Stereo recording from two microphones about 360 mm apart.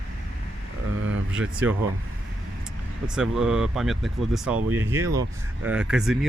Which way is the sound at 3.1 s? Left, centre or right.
Centre.